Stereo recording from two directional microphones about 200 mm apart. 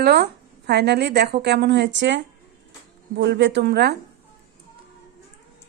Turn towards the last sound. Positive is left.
turn(degrees=-55)  # may be behind; listen again after turning